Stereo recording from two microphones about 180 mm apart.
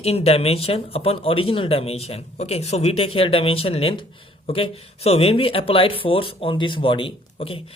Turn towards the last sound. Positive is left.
turn(degrees=30)  # may be behind; listen again after turning